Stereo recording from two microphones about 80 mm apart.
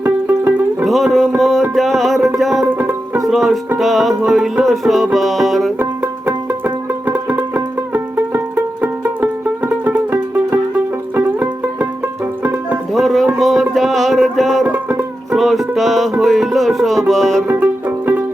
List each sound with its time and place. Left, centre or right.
0.0 s music: right
0.9 s music: centre
2.6 s music: right
3.2 s music: centre
5.8 s music: right
12.9 s music: centre
14.7 s music: right
15.3 s music: centre
17.5 s music: right